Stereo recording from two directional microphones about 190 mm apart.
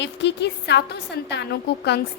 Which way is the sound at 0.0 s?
65° left (ahead or behind).